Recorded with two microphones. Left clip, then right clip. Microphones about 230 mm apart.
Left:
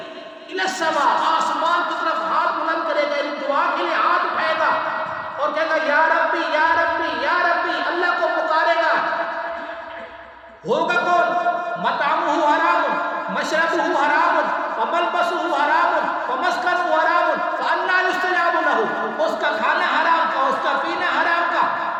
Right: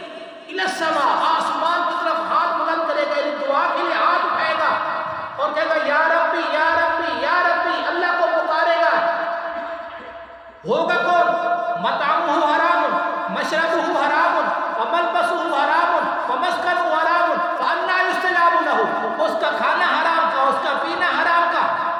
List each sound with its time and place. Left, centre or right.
0.6 s a man's voice: centre
10.7 s a man's voice: centre